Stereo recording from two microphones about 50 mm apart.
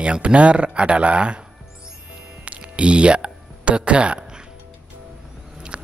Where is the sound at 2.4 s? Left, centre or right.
Right.